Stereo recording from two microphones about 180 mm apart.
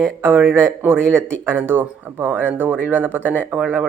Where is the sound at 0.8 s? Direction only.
10° right (ahead or behind).